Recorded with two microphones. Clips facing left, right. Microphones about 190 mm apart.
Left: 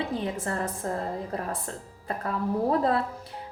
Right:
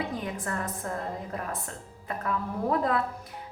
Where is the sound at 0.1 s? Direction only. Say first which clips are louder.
Left 3 dB; 30° left (ahead or behind).